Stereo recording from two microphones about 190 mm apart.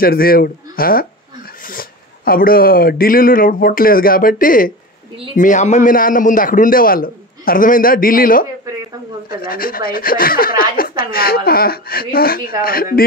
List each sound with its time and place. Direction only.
0.0 s speech: 50° left (ahead or behind)